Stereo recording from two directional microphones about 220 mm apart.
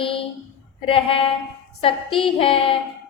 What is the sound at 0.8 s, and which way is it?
A woman's voice, 25° left (ahead or behind).